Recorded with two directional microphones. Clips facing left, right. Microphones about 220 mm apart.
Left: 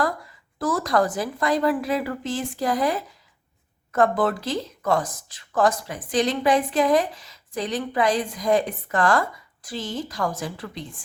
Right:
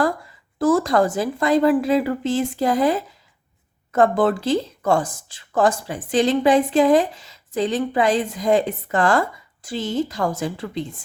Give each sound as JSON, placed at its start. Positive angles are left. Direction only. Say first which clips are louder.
{"t": 0.6, "sound": "a woman's voice", "louder": "right 5 dB", "side_deg": -25}